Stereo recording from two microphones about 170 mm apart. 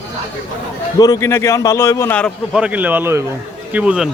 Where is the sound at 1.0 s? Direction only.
20° left (ahead or behind).